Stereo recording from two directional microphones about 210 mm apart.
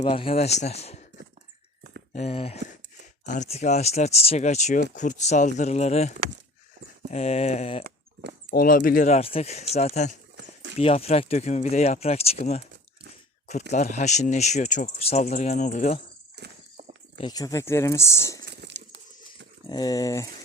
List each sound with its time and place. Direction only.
0.0 s speech: 25° left (ahead or behind)
2.1 s speech: 30° left (ahead or behind)
8.4 s speech: 45° left (ahead or behind)
10.3 s a sound: 60° right (ahead or behind)
10.8 s speech: 30° left (ahead or behind)
16.4 s walk: 50° right (ahead or behind)
17.2 s speech: 20° left (ahead or behind)
18.5 s a sound: 55° right (ahead or behind)
19.6 s speech: 20° left (ahead or behind)